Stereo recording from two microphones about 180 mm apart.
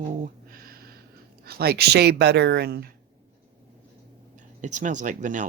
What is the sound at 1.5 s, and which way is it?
Speech, 60° right (ahead or behind).